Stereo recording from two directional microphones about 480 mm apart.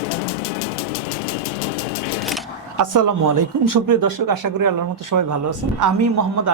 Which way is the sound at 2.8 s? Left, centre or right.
Right.